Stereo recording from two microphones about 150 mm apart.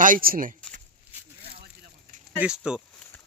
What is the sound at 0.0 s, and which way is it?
Speech, 70° right (ahead or behind).